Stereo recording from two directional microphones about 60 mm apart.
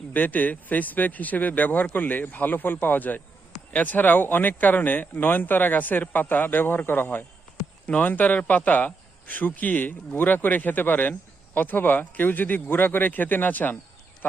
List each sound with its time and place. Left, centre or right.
0.1 s a man's voice: left